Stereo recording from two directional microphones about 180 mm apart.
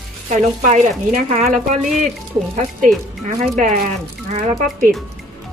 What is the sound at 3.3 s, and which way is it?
Speech, 40° right (ahead or behind).